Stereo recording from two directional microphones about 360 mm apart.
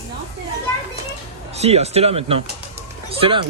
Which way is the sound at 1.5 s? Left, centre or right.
Centre.